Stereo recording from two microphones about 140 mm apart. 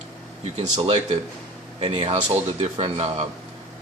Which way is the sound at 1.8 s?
45° right (ahead or behind).